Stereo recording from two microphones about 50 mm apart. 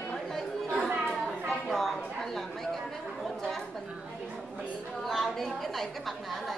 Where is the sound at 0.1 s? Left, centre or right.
Centre.